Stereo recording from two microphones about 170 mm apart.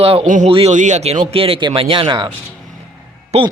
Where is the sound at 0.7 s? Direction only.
45° right (ahead or behind); by 2.2 s 30° right (ahead or behind).